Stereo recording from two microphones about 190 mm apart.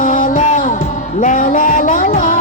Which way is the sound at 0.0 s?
45° left (ahead or behind).